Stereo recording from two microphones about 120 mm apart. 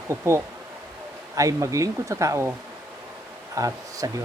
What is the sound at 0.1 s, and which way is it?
Speech, 20° right (ahead or behind).